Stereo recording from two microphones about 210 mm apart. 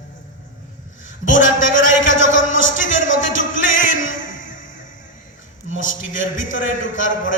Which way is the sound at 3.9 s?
65° left (ahead or behind).